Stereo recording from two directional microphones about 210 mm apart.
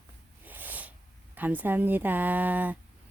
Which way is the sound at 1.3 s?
10° right (ahead or behind).